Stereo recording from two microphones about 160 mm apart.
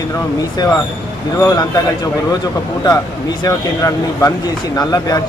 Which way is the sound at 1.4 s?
25° left (ahead or behind).